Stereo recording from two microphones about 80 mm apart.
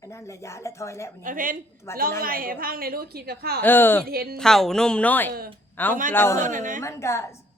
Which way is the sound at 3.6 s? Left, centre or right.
Left.